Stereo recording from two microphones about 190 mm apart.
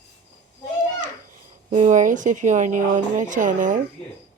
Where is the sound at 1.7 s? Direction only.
40° right (ahead or behind).